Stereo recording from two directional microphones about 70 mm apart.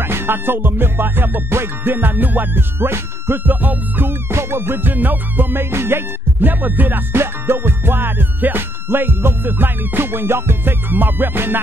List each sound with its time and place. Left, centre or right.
0.0 s music: right
4.3 s music: right